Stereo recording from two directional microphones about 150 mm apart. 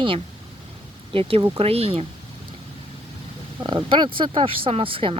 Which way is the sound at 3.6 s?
30° right (ahead or behind).